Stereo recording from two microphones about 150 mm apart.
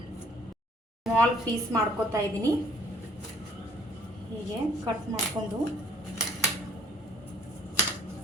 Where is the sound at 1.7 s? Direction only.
20° right (ahead or behind).